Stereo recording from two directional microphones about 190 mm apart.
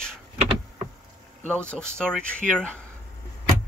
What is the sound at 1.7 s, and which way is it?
Speech, 5° left (ahead or behind).